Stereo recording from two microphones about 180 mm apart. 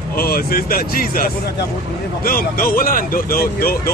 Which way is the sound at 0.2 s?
55° left (ahead or behind).